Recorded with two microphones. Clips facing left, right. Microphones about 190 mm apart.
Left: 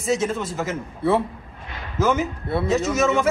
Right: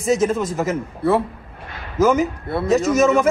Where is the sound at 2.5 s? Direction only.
Centre (ahead or behind).